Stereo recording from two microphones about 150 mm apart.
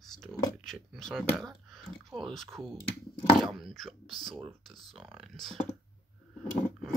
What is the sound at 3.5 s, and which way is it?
Speech, centre (ahead or behind).